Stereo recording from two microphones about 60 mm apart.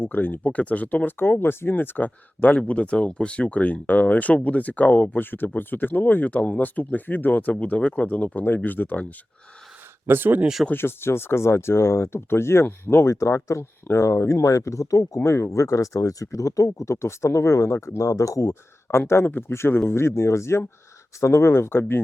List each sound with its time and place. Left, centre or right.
0.0 s speech: left
10.1 s speech: right
10.7 s speech: left
13.1 s speech: left
18.9 s speech: left